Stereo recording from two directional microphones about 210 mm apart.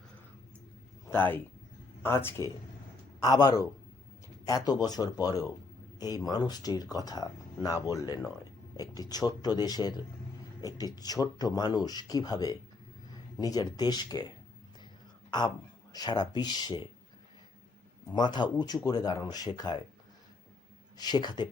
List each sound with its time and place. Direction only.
1.1 s speech: 10° left (ahead or behind)
18.1 s speech: 20° left (ahead or behind)
21.0 s speech: 20° left (ahead or behind)